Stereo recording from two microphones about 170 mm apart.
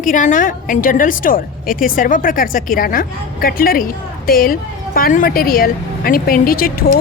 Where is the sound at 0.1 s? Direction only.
50° left (ahead or behind).